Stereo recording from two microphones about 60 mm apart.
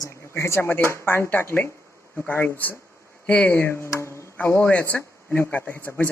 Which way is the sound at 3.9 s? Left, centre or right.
Left.